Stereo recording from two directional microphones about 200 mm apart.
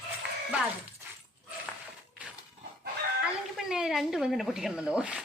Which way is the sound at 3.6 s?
Centre (ahead or behind).